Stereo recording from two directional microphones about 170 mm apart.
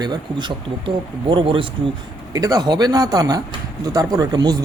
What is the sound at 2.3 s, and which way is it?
Speech, 20° right (ahead or behind).